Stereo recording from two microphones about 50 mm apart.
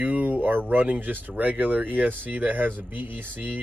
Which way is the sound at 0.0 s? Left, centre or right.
Right.